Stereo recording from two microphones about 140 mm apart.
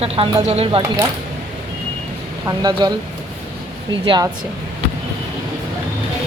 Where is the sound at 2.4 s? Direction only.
30° right (ahead or behind).